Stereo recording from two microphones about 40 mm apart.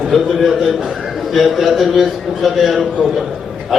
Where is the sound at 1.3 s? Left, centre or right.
Centre.